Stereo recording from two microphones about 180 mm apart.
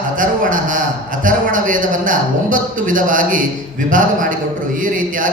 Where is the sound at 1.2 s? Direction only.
50° right (ahead or behind).